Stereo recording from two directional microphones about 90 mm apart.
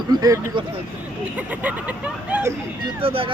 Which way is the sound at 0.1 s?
50° right (ahead or behind).